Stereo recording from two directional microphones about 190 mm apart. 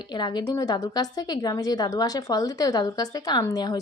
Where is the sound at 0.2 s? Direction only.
20° left (ahead or behind).